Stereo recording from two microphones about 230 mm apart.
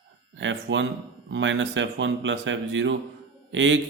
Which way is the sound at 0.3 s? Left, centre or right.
Right.